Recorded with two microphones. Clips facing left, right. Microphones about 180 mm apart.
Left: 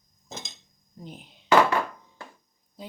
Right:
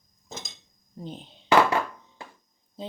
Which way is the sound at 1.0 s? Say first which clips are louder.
Right 4 dB; 30° right (ahead or behind).